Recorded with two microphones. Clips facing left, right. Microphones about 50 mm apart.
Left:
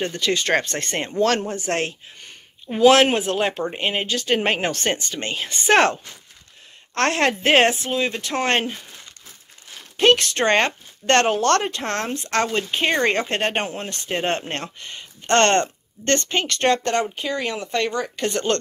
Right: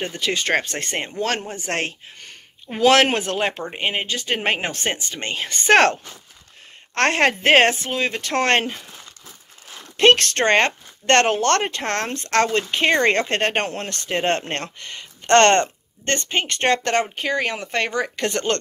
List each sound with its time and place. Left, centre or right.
0.0 s speech: right
1.5 s speech: right
2.8 s speech: right
3.3 s speech: right
3.7 s speech: right
5.1 s speech: right
7.0 s speech: right
9.9 s speech: right
16.1 s speech: right
16.7 s speech: right
17.9 s speech: right